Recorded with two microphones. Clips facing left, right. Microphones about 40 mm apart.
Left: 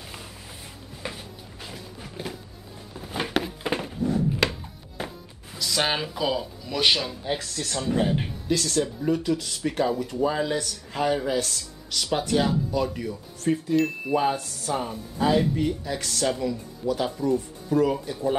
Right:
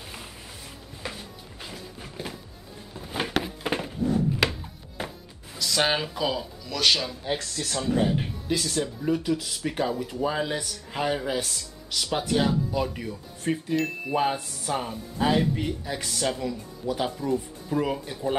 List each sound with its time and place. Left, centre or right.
1.0 s a sound: centre
6.6 s speech: centre
7.0 s speech: centre
8.5 s speech: centre
13.7 s speech: centre
14.1 s speech: centre